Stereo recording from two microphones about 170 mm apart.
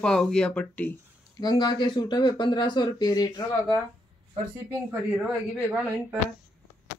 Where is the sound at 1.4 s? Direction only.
25° left (ahead or behind).